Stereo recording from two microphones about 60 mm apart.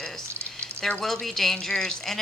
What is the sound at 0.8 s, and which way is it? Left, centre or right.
Speech, centre.